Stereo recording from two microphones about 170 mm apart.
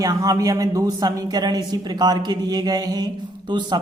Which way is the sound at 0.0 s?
20° right (ahead or behind).